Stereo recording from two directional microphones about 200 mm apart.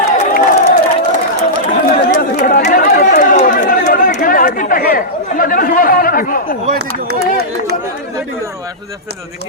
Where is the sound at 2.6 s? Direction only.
40° left (ahead or behind).